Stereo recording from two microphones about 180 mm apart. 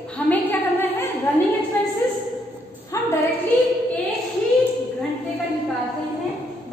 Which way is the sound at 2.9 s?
15° left (ahead or behind).